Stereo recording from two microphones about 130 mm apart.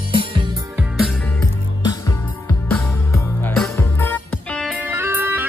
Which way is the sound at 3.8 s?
15° left (ahead or behind).